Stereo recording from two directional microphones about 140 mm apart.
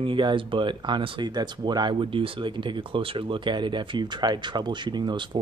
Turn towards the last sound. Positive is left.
turn(degrees=-30)  # may be behind; listen again after turning